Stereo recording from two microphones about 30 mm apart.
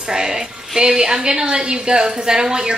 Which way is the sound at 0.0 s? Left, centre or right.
Right.